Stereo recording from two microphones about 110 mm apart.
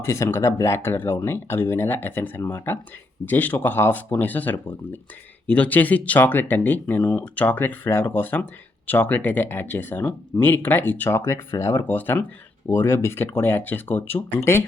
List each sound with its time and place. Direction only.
0.0 s speech: 25° left (ahead or behind)